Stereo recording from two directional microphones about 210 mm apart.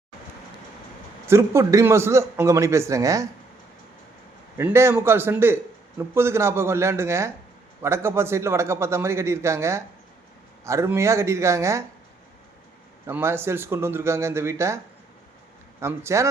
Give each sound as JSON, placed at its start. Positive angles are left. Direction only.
{"t": 1.3, "sound": "a man's voice", "side_deg": -15}
{"t": 4.5, "sound": "a man's voice", "side_deg": -10}
{"t": 13.1, "sound": "a man's voice", "side_deg": -10}
{"t": 15.8, "sound": "a man's voice", "side_deg": -15}